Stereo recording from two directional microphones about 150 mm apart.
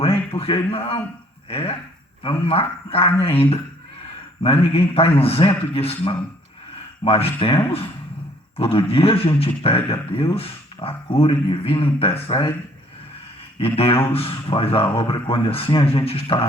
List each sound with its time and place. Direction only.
0.0 s speech: 40° left (ahead or behind)
4.4 s speech: 40° left (ahead or behind)
13.7 s speech: 40° left (ahead or behind)